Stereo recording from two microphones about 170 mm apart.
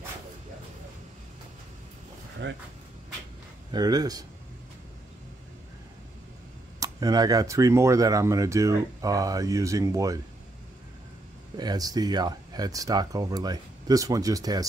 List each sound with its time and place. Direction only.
2.4 s speech: 90° right
3.7 s speech: 20° right (ahead or behind)
6.8 s speech: 20° right (ahead or behind)
11.5 s speech: 25° right (ahead or behind)